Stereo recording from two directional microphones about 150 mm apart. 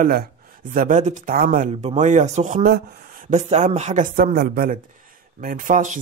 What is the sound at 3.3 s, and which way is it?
Speech, 50° right (ahead or behind).